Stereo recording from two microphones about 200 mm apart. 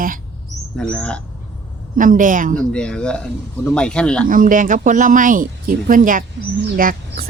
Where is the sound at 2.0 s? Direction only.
40° right (ahead or behind).